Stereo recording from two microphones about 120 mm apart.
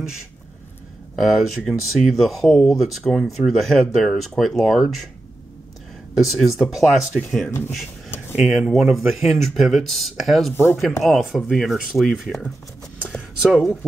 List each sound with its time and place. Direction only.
1.1 s speech: centre (ahead or behind)
6.1 s speech: centre (ahead or behind)
8.4 s speech: 5° right (ahead or behind)
10.5 s speech: 20° left (ahead or behind)
11.1 s speech: 5° right (ahead or behind)
13.1 s a sound: centre (ahead or behind)